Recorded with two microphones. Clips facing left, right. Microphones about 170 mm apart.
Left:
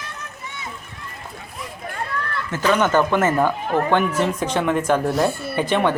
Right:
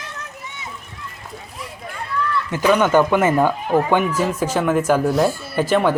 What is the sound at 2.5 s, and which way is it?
Speech, 15° right (ahead or behind).